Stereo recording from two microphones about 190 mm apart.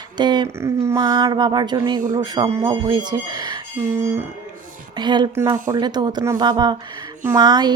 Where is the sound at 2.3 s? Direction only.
15° right (ahead or behind).